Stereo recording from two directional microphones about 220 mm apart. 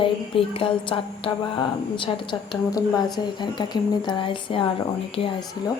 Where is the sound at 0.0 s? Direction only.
25° left (ahead or behind).